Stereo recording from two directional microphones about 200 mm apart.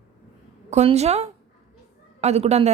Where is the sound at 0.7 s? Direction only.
35° right (ahead or behind).